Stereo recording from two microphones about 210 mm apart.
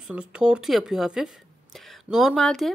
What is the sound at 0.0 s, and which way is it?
Speech, 5° right (ahead or behind).